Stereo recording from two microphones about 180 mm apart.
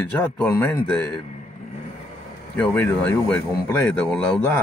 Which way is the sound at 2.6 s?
10° left (ahead or behind).